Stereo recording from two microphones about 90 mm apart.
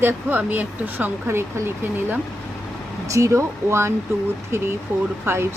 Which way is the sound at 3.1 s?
35° right (ahead or behind).